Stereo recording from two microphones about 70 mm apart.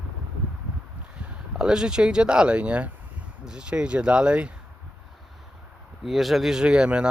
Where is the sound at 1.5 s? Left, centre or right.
Centre.